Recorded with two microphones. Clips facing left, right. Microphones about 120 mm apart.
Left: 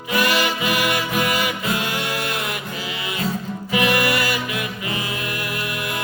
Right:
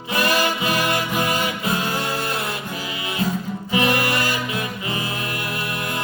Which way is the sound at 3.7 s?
30° right (ahead or behind).